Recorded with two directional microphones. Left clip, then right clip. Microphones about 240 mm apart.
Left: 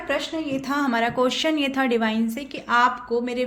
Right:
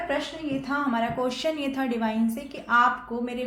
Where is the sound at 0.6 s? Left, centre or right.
Left.